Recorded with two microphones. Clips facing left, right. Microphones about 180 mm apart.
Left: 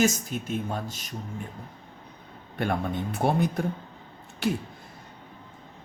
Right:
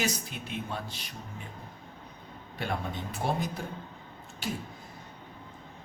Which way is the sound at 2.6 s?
55° left (ahead or behind).